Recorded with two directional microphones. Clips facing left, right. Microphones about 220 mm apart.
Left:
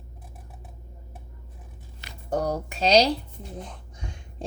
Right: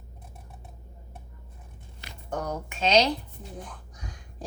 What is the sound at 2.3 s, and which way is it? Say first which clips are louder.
Speech: left 6 dB; 35° left (ahead or behind).